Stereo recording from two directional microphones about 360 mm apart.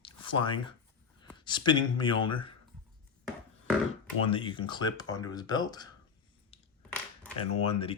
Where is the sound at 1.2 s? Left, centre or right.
Centre.